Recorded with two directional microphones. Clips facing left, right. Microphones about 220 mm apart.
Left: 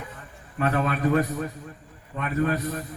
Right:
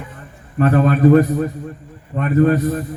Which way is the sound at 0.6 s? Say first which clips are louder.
Right 10 dB; 50° right (ahead or behind).